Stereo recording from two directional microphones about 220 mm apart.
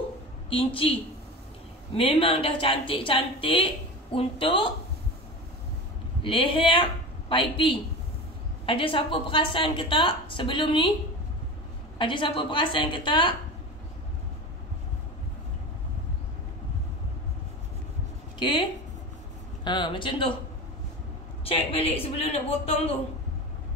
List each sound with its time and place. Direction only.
2.0 s a woman's voice: 25° left (ahead or behind)
6.2 s a woman's voice: 25° left (ahead or behind)
12.0 s a woman's voice: 25° left (ahead or behind)
18.4 s a woman's voice: 20° left (ahead or behind)
21.5 s a woman's voice: 25° left (ahead or behind)